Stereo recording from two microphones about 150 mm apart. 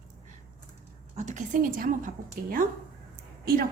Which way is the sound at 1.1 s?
50° right (ahead or behind).